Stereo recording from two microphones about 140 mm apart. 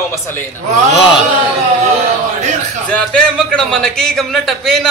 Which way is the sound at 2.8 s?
5° left (ahead or behind).